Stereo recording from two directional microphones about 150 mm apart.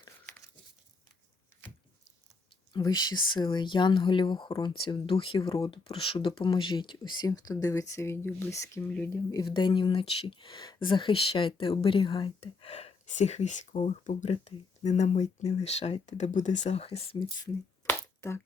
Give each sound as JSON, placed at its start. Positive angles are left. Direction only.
{"t": 2.7, "sound": "speech", "side_deg": 30}
{"t": 9.3, "sound": "speech", "side_deg": 30}
{"t": 12.4, "sound": "speech", "side_deg": 45}
{"t": 17.8, "sound": "finger snapping", "side_deg": 20}